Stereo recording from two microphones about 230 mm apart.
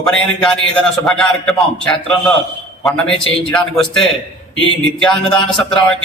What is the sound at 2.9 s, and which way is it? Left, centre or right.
A man's voice, centre.